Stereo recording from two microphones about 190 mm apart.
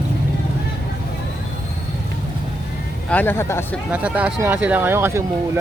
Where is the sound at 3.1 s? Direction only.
10° left (ahead or behind).